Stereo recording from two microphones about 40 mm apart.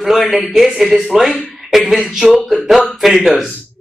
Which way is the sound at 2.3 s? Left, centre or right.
Centre.